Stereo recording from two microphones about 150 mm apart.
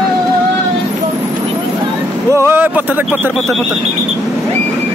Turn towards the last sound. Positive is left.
turn(degrees=0)  # may be behind; listen again after turning